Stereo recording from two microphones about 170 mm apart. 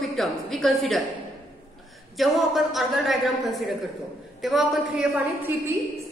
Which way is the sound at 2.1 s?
Centre (ahead or behind).